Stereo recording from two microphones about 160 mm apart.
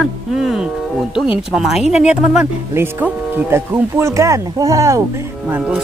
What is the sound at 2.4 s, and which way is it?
Speech, 15° right (ahead or behind).